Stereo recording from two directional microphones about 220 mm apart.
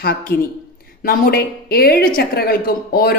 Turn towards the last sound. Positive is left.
turn(degrees=40)  # may be behind; listen again after turning